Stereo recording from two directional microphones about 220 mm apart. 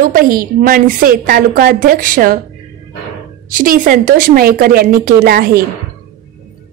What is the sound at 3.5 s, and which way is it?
A woman's voice, 40° right (ahead or behind).